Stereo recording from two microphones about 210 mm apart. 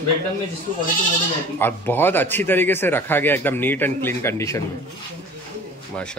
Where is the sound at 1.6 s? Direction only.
10° left (ahead or behind).